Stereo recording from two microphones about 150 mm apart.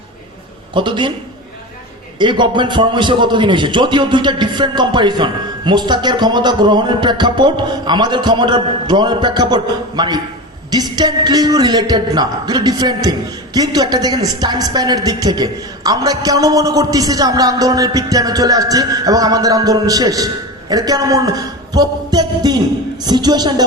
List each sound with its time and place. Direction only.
0.7 s a man's voice: 30° right (ahead or behind)
2.1 s a man's voice: 30° right (ahead or behind)
10.7 s music: 25° right (ahead or behind)